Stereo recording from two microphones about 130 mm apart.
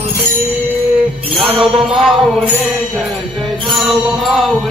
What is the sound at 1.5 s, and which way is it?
Music, centre (ahead or behind).